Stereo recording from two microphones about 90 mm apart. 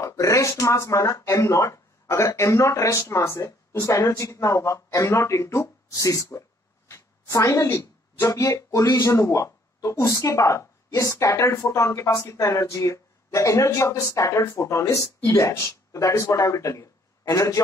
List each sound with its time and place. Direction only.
0.0 s speech: 35° left (ahead or behind)